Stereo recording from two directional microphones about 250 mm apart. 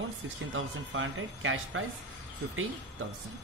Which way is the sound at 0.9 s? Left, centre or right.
Right.